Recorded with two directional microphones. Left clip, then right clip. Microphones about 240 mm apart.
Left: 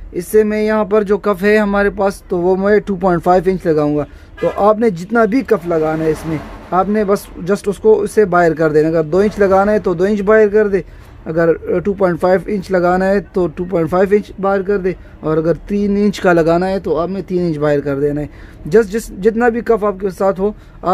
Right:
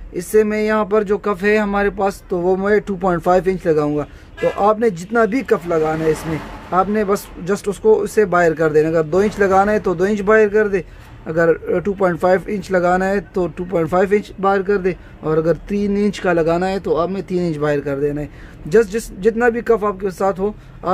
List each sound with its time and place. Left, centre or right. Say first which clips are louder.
0.1 s speech: left 2 dB; centre